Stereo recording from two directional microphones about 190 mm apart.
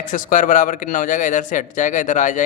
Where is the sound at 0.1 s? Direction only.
45° left (ahead or behind).